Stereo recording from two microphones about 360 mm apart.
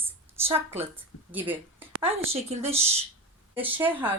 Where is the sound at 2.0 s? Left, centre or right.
Centre.